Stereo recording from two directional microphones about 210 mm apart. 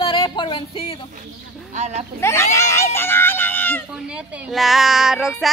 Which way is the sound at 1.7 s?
35° right (ahead or behind).